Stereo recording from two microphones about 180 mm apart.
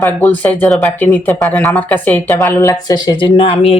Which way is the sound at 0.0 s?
10° left (ahead or behind).